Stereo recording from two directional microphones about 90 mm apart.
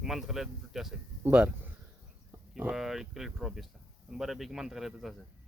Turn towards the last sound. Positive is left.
turn(degrees=-5)  # may be behind; listen again after turning